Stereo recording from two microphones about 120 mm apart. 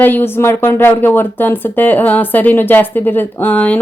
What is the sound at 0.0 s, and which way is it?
Speech, 15° left (ahead or behind).